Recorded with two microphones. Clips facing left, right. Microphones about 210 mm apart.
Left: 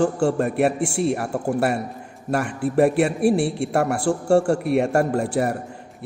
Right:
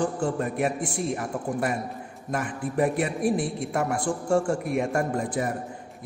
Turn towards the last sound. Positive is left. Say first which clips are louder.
# left 5 dB
turn(degrees=70)  # may be behind; listen again after turning